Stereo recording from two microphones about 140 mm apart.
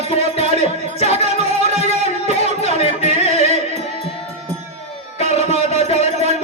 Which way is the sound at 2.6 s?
50° left (ahead or behind).